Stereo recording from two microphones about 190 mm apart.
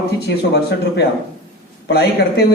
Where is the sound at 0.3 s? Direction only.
60° left (ahead or behind).